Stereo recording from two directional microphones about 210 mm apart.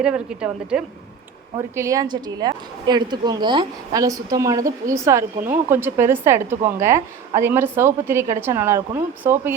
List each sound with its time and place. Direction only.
0.0 s a woman's voice: 5° right (ahead or behind)
1.5 s a woman's voice: 15° right (ahead or behind)